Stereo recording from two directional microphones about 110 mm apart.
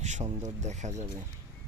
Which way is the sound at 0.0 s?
85° right.